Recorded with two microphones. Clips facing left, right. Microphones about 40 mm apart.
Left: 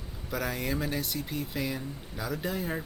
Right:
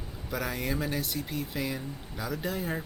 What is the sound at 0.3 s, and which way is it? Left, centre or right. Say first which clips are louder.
Speech: even; centre.